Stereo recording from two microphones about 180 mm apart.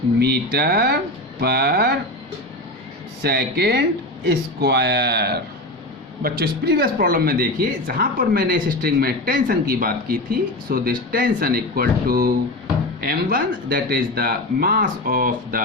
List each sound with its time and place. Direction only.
0.2 s speech: 60° right (ahead or behind)
3.2 s speech: 65° right (ahead or behind)